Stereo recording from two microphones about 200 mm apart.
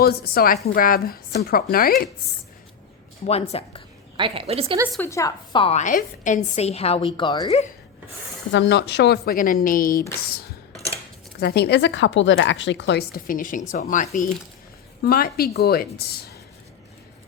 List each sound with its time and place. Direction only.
0.0 s speech: 50° left (ahead or behind)
3.2 s a woman's voice: 30° left (ahead or behind)
4.2 s a woman's voice: 30° right (ahead or behind)
4.9 s a woman's voice: 15° left (ahead or behind)
8.5 s speech: 55° left (ahead or behind)
11.3 s speech: 55° left (ahead or behind)